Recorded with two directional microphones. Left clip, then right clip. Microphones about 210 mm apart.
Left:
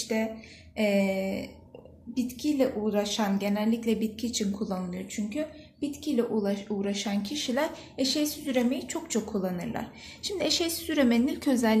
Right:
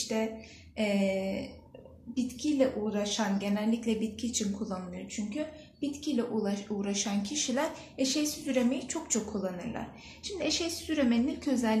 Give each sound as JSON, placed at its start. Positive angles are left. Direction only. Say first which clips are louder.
{"t": 0.7, "sound": "a woman's voice", "louder": "left 4 dB", "side_deg": 40}